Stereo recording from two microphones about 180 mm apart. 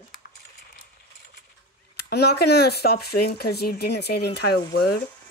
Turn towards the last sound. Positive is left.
turn(degrees=65)  # may be behind; listen again after turning